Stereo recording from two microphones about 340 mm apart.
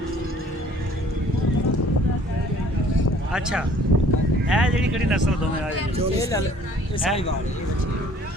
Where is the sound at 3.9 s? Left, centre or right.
Right.